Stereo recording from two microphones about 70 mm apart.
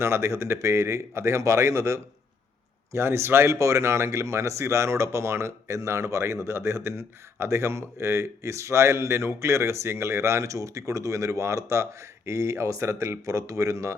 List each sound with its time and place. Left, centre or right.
0.0 s speech: right